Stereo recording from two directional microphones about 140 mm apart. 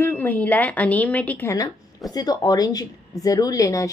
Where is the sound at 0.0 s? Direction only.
15° left (ahead or behind).